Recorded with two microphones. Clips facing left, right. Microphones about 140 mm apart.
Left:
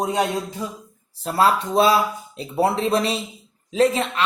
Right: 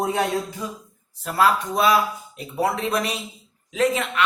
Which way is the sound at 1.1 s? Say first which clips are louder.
Left 1 dB; 30° left (ahead or behind).